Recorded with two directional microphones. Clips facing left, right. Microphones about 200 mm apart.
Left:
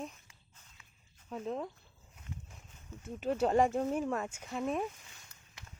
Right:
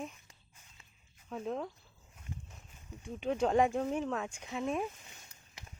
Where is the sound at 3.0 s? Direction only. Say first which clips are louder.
Even; 5° left (ahead or behind).